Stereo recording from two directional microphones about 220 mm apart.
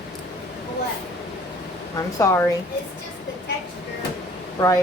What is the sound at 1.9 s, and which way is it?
Speech, 15° left (ahead or behind).